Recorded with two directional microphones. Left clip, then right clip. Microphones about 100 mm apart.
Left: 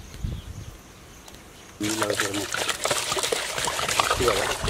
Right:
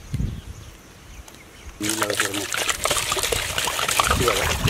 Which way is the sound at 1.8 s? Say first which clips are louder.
Right 2 dB; 10° right (ahead or behind).